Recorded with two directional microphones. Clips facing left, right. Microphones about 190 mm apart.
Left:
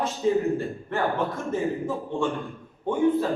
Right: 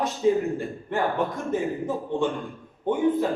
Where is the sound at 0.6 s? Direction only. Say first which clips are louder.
Even; 15° right (ahead or behind).